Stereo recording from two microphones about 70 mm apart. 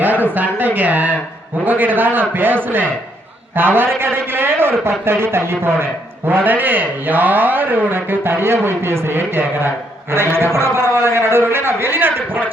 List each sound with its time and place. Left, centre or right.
0.0 s a man's voice: right